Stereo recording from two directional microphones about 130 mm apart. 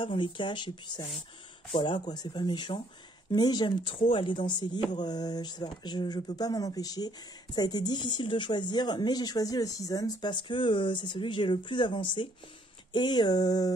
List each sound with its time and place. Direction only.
0.0 s speech: 40° left (ahead or behind)